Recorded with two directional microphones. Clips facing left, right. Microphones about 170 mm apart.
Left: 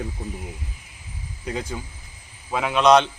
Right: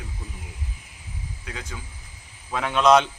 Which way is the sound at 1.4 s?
30° left (ahead or behind).